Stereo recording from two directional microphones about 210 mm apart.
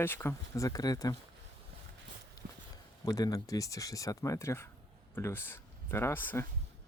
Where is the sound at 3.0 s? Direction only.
15° left (ahead or behind).